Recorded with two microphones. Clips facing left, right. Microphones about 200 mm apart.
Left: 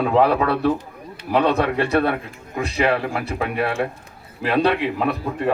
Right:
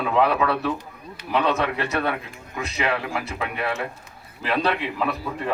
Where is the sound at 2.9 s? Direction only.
50° left (ahead or behind).